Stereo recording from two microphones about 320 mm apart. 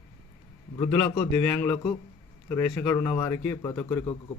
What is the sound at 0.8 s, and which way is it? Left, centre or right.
Speech, centre.